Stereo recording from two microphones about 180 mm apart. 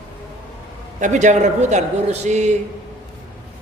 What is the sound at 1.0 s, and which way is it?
A woman's voice, 40° right (ahead or behind).